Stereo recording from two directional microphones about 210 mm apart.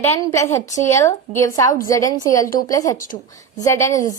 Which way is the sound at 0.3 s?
15° left (ahead or behind).